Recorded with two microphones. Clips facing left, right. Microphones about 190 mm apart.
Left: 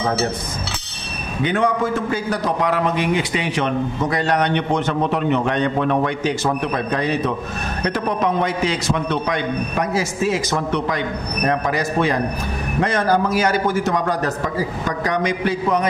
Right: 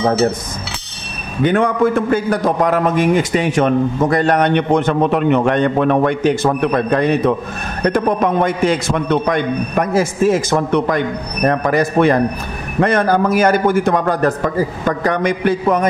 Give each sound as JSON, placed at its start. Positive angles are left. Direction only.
{"t": 1.4, "sound": "a man's voice", "side_deg": -55}